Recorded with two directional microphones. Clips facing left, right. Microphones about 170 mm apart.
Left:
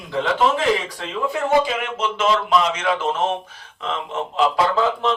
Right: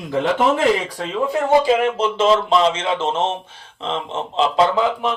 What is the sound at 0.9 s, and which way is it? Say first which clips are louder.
Speech: right 4 dB; 35° right (ahead or behind).